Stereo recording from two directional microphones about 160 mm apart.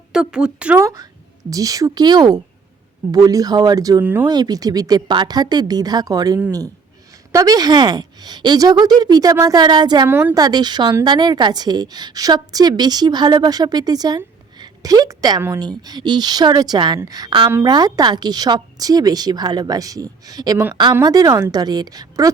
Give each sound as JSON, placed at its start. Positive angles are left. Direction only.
{"t": 0.1, "sound": "speech", "side_deg": -5}
{"t": 0.8, "sound": "a woman's voice", "side_deg": -20}
{"t": 4.0, "sound": "a woman's voice", "side_deg": -10}
{"t": 4.3, "sound": "a woman's voice", "side_deg": -25}
{"t": 10.1, "sound": "a woman's voice", "side_deg": -15}
{"t": 10.4, "sound": "a woman's voice", "side_deg": -25}